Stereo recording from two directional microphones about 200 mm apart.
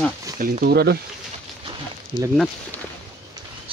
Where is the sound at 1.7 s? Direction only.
20° right (ahead or behind).